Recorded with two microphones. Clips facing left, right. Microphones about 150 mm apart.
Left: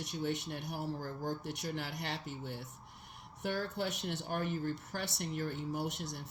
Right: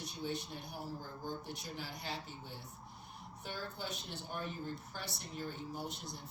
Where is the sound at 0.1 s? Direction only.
80° left.